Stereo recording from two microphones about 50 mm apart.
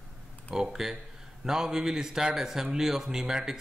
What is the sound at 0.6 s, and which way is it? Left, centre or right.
A man's voice, centre.